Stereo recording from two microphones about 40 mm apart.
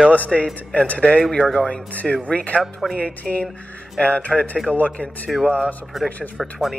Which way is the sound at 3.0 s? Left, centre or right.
Left.